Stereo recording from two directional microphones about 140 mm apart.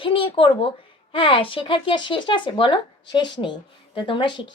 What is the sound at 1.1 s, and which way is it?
Speech, 40° left (ahead or behind).